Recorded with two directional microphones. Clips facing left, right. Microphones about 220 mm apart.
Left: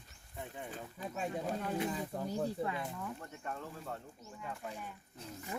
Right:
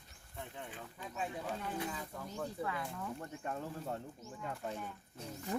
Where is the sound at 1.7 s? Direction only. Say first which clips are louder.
Left 5 dB; 30° left (ahead or behind).